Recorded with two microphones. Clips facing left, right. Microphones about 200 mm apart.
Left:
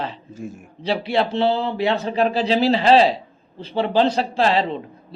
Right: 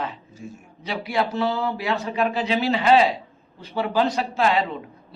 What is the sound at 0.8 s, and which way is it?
A man's voice, 30° left (ahead or behind).